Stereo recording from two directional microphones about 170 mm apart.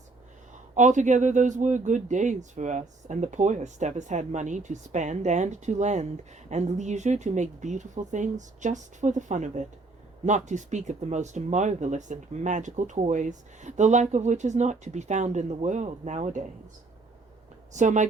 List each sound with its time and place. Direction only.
0.8 s speech: 45° right (ahead or behind)
17.7 s speech: 45° right (ahead or behind)